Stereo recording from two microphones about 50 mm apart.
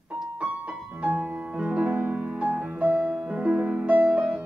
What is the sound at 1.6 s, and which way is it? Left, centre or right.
Music, right.